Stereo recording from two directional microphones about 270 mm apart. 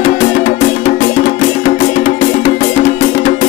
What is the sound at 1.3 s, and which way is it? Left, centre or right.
Music, left.